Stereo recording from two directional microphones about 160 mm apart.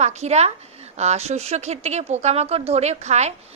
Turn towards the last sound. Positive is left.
turn(degrees=-45)  # may be behind; listen again after turning